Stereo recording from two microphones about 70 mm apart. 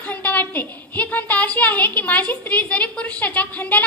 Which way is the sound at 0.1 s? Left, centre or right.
Left.